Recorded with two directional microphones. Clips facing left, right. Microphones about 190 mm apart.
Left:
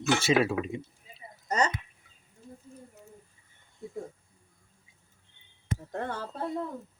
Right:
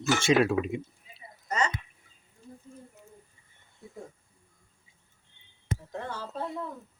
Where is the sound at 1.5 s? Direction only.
40° left (ahead or behind).